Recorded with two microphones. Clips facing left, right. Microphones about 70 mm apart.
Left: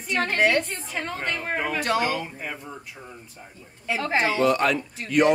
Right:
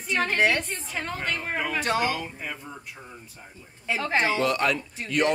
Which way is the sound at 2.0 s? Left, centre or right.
Left.